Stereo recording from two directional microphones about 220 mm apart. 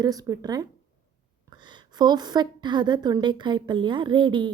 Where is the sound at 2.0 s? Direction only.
20° right (ahead or behind).